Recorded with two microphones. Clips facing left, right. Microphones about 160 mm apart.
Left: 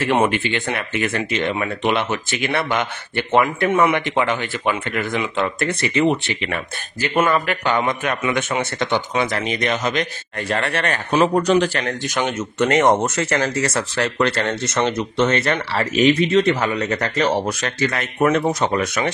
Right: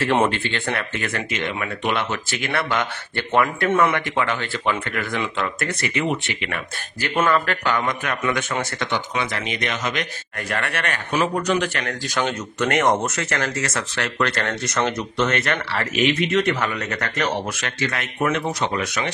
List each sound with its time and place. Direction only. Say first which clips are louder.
0.0 s speech: left 2 dB; 15° left (ahead or behind)
7.0 s speech: left 2 dB; 15° left (ahead or behind); by 11.9 s 30° left (ahead or behind)
12.1 s speech: left 2 dB; 20° left (ahead or behind); by 19.0 s 45° left (ahead or behind)